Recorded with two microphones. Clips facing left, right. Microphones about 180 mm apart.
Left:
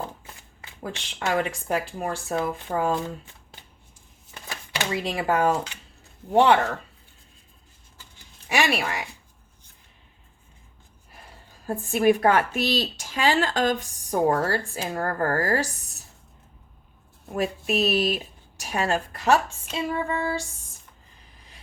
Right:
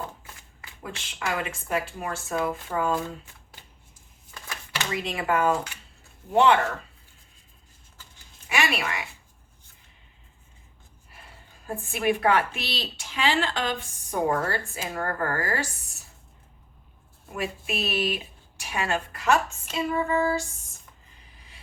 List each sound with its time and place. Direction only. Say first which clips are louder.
0.8 s a woman's voice: left 3 dB; 35° left (ahead or behind)
4.3 s a sound: left 2 dB; 20° left (ahead or behind)
5.0 s a woman's voice: left 1 dB; 35° left (ahead or behind)
8.4 s speech: left 3 dB; 35° left (ahead or behind)
11.6 s a woman's voice: left 6 dB; 40° left (ahead or behind)
17.3 s a woman's voice: left 6 dB; 40° left (ahead or behind)